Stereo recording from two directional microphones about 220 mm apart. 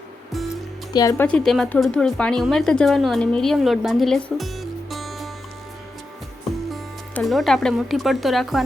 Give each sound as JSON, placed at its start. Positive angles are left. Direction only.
{"t": 0.9, "sound": "speech", "side_deg": 15}
{"t": 1.3, "sound": "speech", "side_deg": 0}
{"t": 6.7, "sound": "speech", "side_deg": 0}